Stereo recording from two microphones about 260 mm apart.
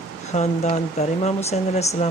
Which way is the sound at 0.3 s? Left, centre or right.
Left.